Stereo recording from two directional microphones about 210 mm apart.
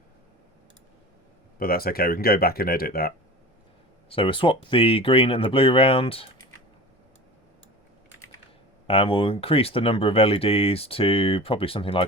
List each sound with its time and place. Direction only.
1.5 s speech: 45° left (ahead or behind)
4.1 s speech: 25° left (ahead or behind)
8.9 s speech: 25° left (ahead or behind)